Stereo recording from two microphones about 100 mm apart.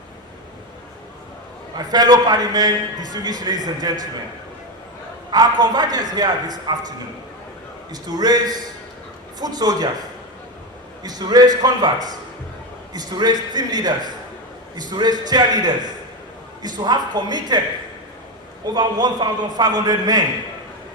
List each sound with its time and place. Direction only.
1.7 s a man's voice: 40° right (ahead or behind)
5.3 s a man's voice: 45° right (ahead or behind)
8.0 s a man's voice: 45° right (ahead or behind)
11.0 s a man's voice: 40° right (ahead or behind)
18.7 s a man's voice: 45° right (ahead or behind)